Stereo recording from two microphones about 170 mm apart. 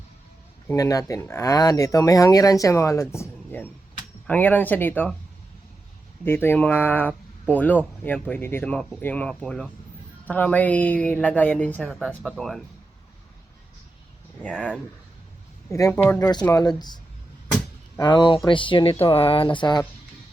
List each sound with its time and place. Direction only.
0.7 s a woman's voice: 20° left (ahead or behind)
6.2 s a woman's voice: 15° left (ahead or behind)
14.5 s speech: 5° right (ahead or behind)
15.7 s a woman's voice: 15° left (ahead or behind)
16.3 s speech: 25° left (ahead or behind)
18.0 s speech: 25° left (ahead or behind)